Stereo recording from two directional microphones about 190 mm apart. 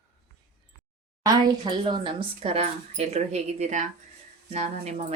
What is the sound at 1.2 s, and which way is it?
Speech, 20° right (ahead or behind).